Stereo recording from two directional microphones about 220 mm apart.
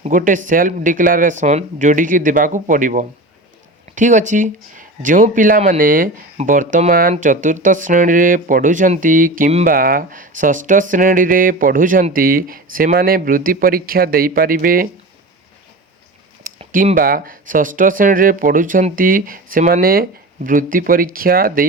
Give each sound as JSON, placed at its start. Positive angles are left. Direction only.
{"t": 0.0, "sound": "speech", "side_deg": -35}
{"t": 16.4, "sound": "speech", "side_deg": -35}